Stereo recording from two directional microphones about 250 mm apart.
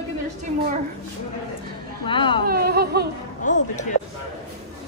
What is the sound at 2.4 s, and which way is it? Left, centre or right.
Speech, right.